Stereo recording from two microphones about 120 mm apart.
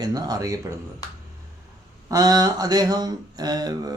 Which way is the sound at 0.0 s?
35° right (ahead or behind).